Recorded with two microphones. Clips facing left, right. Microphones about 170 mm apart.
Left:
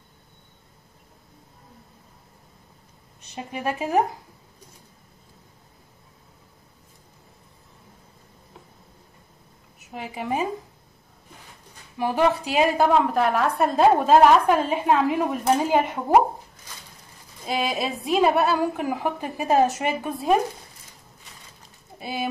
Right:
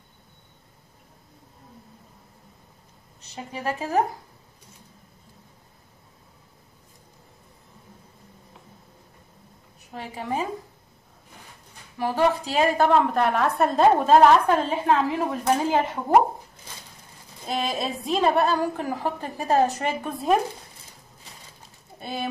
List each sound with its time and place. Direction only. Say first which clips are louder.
3.3 s a woman's voice: left 2 dB; 15° left (ahead or behind)
9.9 s a woman's voice: left 2 dB; 10° left (ahead or behind)
12.0 s a woman's voice: left 1 dB; 15° left (ahead or behind)
17.5 s a woman's voice: left 1 dB; centre (ahead or behind)
21.9 s speech: left 2 dB; 5° left (ahead or behind)